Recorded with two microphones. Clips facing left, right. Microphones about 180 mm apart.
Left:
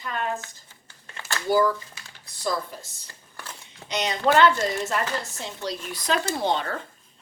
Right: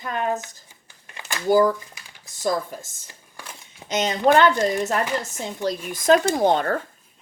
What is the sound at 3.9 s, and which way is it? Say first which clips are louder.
Speech: right 4 dB; 45° right (ahead or behind).